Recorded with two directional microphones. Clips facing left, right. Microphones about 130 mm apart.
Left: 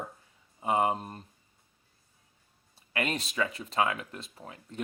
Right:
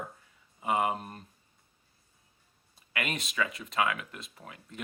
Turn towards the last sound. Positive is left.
turn(degrees=30)  # may be behind; listen again after turning